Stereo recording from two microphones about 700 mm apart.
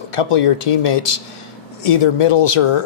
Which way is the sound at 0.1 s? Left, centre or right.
Left.